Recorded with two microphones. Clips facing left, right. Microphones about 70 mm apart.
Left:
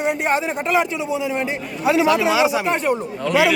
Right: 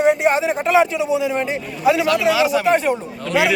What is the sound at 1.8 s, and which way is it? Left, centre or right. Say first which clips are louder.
Speech: right 1 dB; left.